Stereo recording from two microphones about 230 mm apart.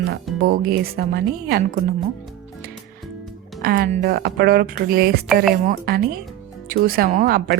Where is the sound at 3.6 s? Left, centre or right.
Right.